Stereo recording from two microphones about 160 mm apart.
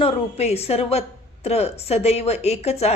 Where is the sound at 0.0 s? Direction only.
40° left (ahead or behind).